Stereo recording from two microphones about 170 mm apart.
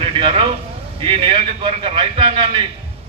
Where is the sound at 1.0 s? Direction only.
30° right (ahead or behind).